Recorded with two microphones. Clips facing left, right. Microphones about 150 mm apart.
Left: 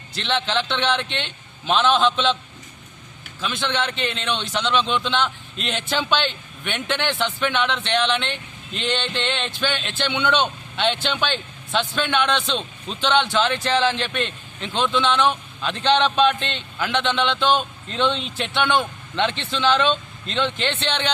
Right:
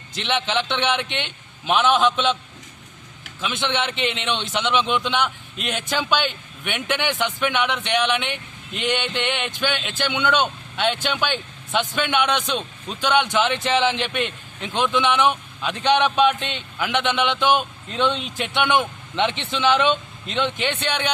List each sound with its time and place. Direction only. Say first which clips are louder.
0.1 s speech: even; 20° right (ahead or behind)
3.4 s speech: even; 20° right (ahead or behind)